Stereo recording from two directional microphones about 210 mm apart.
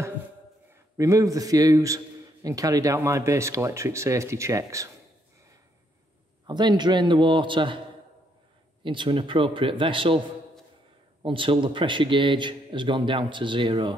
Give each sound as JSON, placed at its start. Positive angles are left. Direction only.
{"t": 0.9, "sound": "a man's voice", "side_deg": -15}
{"t": 6.4, "sound": "a man's voice", "side_deg": -20}
{"t": 8.8, "sound": "a man's voice", "side_deg": -25}
{"t": 11.2, "sound": "a man's voice", "side_deg": -25}